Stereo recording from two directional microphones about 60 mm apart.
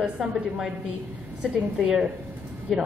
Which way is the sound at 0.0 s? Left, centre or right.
Centre.